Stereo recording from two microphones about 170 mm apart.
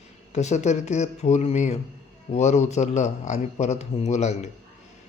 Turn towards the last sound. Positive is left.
turn(degrees=40)  # may be behind; listen again after turning